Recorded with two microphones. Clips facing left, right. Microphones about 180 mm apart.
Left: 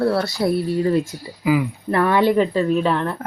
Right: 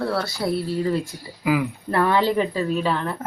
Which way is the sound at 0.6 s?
20° left (ahead or behind).